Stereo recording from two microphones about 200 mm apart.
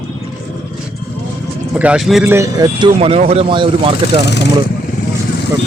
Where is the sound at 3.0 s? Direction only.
30° right (ahead or behind).